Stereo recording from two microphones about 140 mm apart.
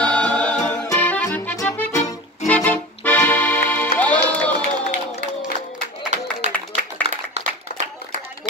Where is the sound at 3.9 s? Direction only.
10° left (ahead or behind).